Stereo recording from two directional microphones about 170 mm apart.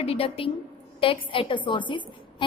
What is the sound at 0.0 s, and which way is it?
A woman's voice, 35° left (ahead or behind).